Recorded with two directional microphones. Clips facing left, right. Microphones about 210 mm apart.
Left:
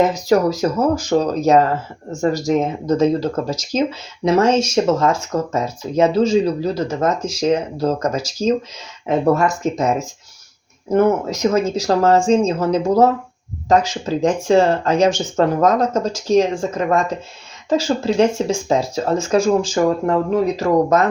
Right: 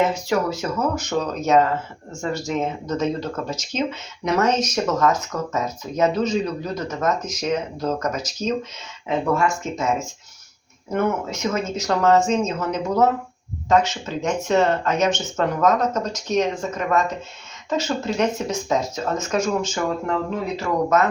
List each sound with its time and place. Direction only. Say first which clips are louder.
0.0 s speech: left 6 dB; 40° left (ahead or behind)